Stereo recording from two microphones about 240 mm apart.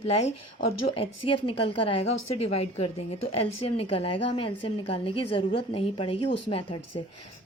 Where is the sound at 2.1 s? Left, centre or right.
Left.